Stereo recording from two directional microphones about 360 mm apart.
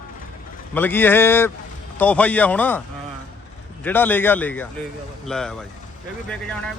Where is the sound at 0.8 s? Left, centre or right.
Centre.